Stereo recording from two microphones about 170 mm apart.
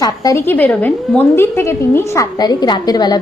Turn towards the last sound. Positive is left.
turn(degrees=25)  # may be behind; listen again after turning